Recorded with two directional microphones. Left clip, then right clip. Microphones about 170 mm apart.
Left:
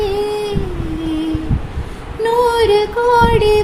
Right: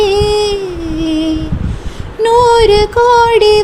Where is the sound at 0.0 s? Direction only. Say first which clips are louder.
Right 7 dB; 45° right (ahead or behind).